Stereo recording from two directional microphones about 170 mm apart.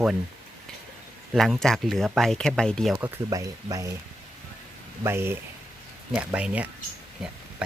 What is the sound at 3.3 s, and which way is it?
Speech, 20° right (ahead or behind).